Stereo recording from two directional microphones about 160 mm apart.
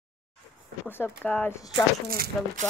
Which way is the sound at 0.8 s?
15° left (ahead or behind).